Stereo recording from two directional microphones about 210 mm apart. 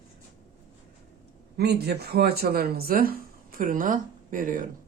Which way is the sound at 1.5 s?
50° right (ahead or behind).